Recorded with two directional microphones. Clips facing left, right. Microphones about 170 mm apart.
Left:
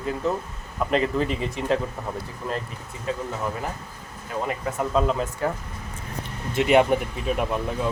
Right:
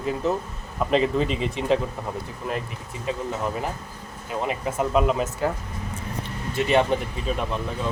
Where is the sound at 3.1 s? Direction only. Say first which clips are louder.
Right 1 dB; 20° right (ahead or behind).